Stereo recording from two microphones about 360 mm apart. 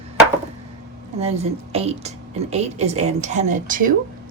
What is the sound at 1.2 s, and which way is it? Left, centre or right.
A woman's voice, centre.